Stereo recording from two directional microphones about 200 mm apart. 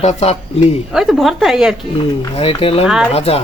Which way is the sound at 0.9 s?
Centre (ahead or behind).